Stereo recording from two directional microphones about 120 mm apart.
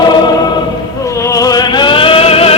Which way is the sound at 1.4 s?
30° left (ahead or behind).